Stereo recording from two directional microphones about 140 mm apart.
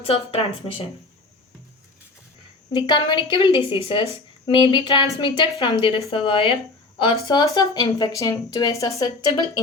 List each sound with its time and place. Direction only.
0.0 s speech: 45° left (ahead or behind)
2.7 s a woman's voice: 35° left (ahead or behind)
7.3 s speech: 30° left (ahead or behind)